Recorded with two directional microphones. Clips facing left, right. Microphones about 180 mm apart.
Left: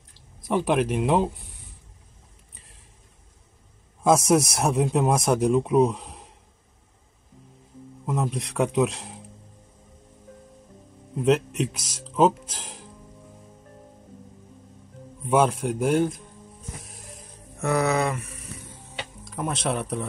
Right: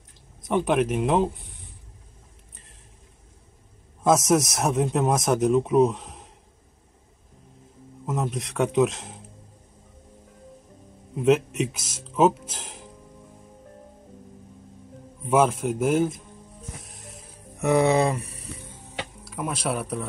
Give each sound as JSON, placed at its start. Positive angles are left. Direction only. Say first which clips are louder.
{"t": 0.5, "sound": "speech", "louder": "even", "side_deg": 0}
{"t": 2.5, "sound": "a sound", "louder": "right 1 dB", "side_deg": 0}
{"t": 4.0, "sound": "speech", "louder": "left 1 dB", "side_deg": 0}
{"t": 8.0, "sound": "speech", "louder": "left 1 dB", "side_deg": 0}
{"t": 11.1, "sound": "speech", "louder": "right 1 dB", "side_deg": -5}
{"t": 15.2, "sound": "speech", "louder": "even", "side_deg": 0}
{"t": 16.8, "sound": "music", "louder": "even", "side_deg": 0}
{"t": 17.6, "sound": "speech", "louder": "right 3 dB", "side_deg": -20}
{"t": 19.2, "sound": "speech", "louder": "left 1 dB", "side_deg": -10}